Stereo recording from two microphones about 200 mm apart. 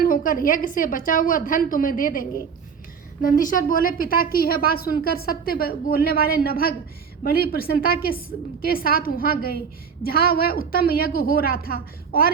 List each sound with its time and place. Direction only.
0.0 s a woman's voice: 45° left (ahead or behind)